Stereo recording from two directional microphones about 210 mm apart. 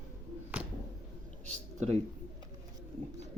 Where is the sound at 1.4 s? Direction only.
35° right (ahead or behind).